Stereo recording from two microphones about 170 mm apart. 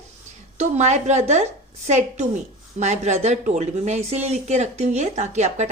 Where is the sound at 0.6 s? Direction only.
40° right (ahead or behind).